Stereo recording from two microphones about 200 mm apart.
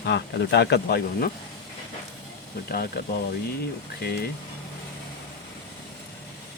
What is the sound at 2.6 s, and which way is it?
Speech, 50° left (ahead or behind).